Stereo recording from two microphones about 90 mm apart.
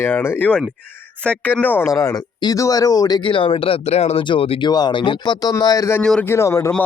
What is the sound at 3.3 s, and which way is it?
Speech, 80° left.